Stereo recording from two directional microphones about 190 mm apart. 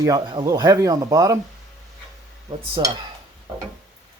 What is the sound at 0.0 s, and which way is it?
Speech, 20° right (ahead or behind).